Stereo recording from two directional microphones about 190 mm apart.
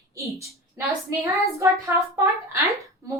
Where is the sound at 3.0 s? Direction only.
15° right (ahead or behind).